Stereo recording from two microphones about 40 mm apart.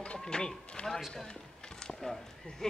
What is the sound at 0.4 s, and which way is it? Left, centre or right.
Speech, centre.